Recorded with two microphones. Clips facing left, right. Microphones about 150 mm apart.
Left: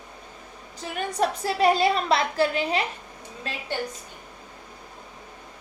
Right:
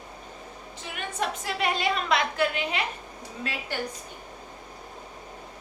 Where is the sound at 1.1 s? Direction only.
35° left (ahead or behind).